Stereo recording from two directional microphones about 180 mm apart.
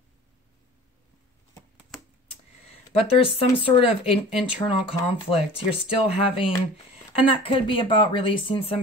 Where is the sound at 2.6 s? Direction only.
35° left (ahead or behind).